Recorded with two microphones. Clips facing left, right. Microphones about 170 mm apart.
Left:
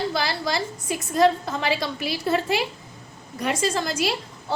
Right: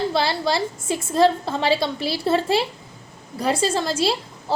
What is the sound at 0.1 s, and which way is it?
A woman's voice, 30° right (ahead or behind).